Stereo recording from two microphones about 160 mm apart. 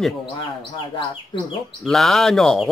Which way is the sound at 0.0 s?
Centre (ahead or behind).